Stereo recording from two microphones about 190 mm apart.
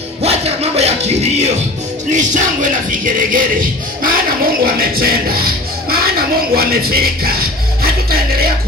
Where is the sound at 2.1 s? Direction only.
40° right (ahead or behind).